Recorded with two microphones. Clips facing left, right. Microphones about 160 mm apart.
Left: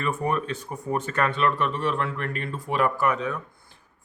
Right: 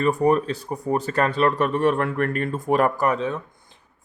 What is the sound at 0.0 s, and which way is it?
Speech, 35° right (ahead or behind).